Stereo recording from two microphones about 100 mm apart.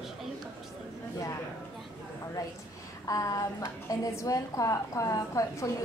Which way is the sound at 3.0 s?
35° left (ahead or behind).